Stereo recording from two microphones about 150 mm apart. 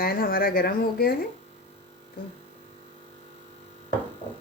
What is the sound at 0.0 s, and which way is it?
Speech, 80° left.